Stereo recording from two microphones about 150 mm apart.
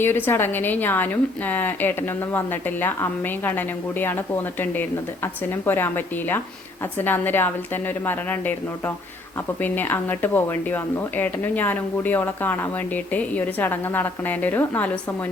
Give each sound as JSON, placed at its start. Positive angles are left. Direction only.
{"t": 0.0, "sound": "a woman's voice", "side_deg": 15}
{"t": 9.6, "sound": "a woman's voice", "side_deg": 10}